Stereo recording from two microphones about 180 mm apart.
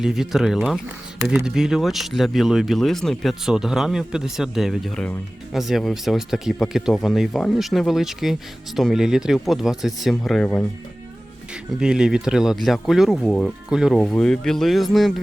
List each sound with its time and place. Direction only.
0.0 s speech: centre (ahead or behind)
11.7 s speech: 5° right (ahead or behind)